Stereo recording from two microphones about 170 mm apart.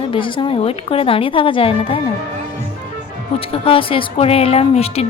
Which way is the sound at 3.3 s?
30° left (ahead or behind).